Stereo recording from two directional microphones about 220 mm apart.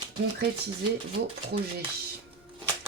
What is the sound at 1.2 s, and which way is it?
Speech, 50° right (ahead or behind).